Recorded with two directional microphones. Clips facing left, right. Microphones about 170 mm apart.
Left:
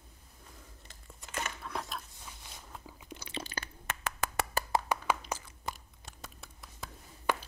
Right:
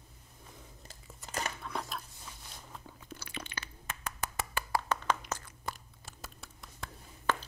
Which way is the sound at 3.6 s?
80° left.